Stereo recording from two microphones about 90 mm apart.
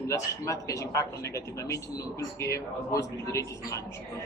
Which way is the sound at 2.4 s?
35° left (ahead or behind).